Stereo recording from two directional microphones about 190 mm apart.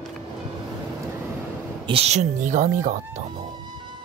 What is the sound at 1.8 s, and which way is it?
Speech, 30° right (ahead or behind).